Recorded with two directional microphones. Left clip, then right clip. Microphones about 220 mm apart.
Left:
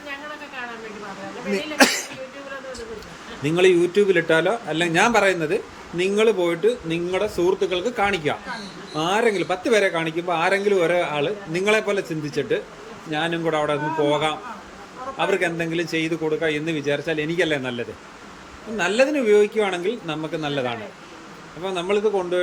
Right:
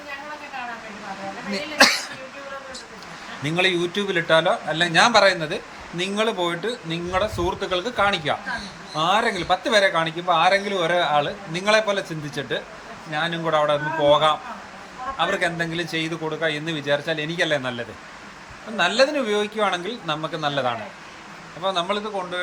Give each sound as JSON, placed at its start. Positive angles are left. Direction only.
{"t": 3.4, "sound": "a man's voice", "side_deg": 10}
{"t": 21.6, "sound": "a man's voice", "side_deg": 5}